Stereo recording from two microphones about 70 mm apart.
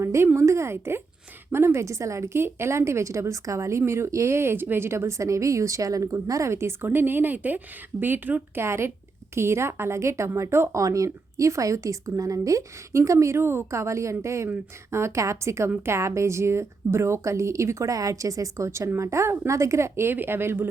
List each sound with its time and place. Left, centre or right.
0.0 s a sound: right
0.3 s speech: right
6.9 s speech: right